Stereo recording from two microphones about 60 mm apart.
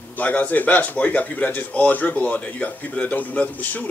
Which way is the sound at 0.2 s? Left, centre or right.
Left.